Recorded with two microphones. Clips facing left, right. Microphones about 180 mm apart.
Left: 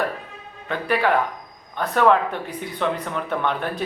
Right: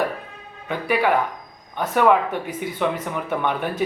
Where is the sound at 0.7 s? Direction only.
10° right (ahead or behind).